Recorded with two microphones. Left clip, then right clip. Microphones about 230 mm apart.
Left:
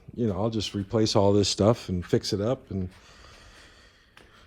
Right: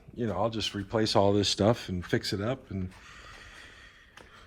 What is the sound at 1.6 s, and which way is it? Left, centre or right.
Speech, right.